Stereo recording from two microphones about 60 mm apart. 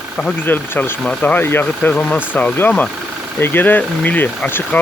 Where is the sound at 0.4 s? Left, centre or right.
Left.